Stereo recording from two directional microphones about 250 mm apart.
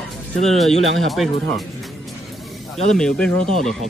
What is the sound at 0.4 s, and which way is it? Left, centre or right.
Speech, centre.